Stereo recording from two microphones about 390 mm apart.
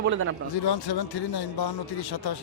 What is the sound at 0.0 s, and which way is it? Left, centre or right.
Speech, right.